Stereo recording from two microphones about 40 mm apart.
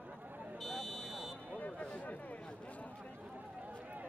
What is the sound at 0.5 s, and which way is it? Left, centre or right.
Buzzer, centre.